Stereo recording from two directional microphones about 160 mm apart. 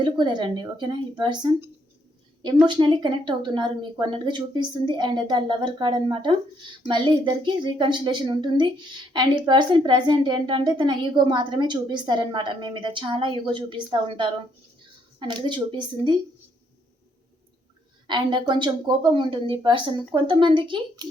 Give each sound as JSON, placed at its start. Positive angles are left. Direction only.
{"t": 0.0, "sound": "a woman's voice", "side_deg": -30}
{"t": 2.6, "sound": "a woman's voice", "side_deg": -30}
{"t": 18.1, "sound": "a woman's voice", "side_deg": -30}